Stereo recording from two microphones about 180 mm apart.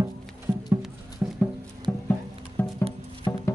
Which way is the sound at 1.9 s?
5° left (ahead or behind).